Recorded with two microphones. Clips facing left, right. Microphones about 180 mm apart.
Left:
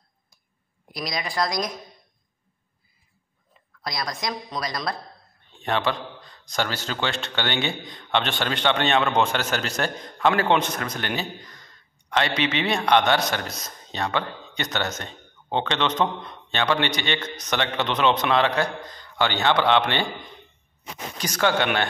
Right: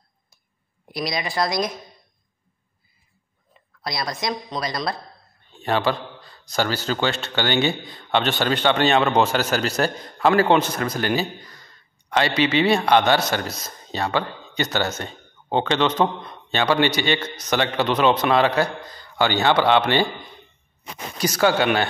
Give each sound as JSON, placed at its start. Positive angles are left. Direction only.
{"t": 0.9, "sound": "a man's voice", "side_deg": 0}
{"t": 3.8, "sound": "a man's voice", "side_deg": 0}
{"t": 9.0, "sound": "speech", "side_deg": -35}
{"t": 9.3, "sound": "a man's voice", "side_deg": -5}
{"t": 21.2, "sound": "a man's voice", "side_deg": -10}